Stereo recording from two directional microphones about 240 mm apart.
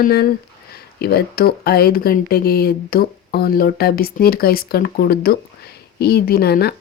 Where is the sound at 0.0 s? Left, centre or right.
Left.